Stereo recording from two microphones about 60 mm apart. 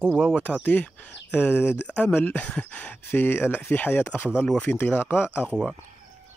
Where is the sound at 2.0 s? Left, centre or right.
Left.